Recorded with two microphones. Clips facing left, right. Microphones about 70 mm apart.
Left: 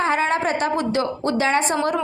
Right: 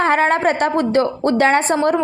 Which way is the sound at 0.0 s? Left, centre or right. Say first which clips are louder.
Right 5 dB; right.